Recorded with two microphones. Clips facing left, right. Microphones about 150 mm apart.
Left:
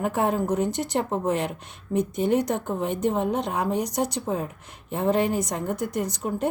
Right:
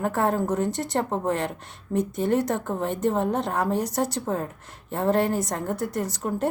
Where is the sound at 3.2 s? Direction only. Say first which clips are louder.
Even; 20° left (ahead or behind).